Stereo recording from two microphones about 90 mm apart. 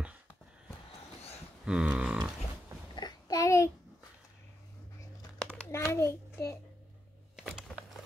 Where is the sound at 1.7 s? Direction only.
10° right (ahead or behind).